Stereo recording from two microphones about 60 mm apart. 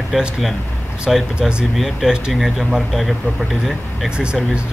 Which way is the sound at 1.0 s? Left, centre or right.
Centre.